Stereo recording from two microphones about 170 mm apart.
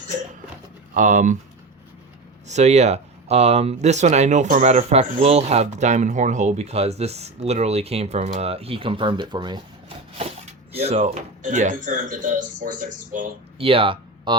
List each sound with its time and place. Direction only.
0.9 s speech: 50° right (ahead or behind)
2.5 s speech: 40° right (ahead or behind)
10.8 s speech: 40° right (ahead or behind)
13.6 s speech: 35° right (ahead or behind)